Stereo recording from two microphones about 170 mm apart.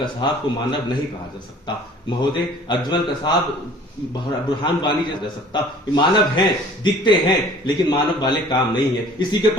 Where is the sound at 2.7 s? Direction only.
25° left (ahead or behind).